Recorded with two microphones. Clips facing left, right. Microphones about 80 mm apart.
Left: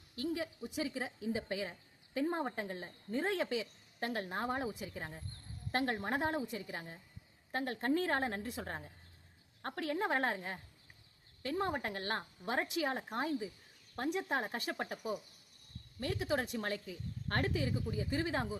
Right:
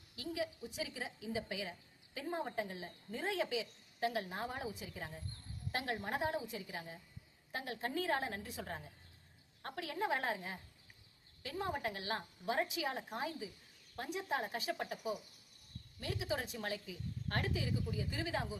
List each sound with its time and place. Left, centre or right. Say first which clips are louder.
0.2 s a woman's voice: left 3 dB; left
16.0 s a woman's voice: left 4 dB; left